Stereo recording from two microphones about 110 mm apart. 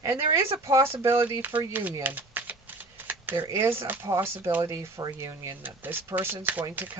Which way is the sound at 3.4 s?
25° right (ahead or behind).